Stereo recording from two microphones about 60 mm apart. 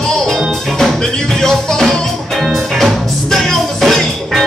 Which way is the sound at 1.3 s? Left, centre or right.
Centre.